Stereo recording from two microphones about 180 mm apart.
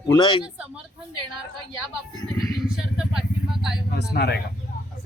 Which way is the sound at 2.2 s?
Centre (ahead or behind).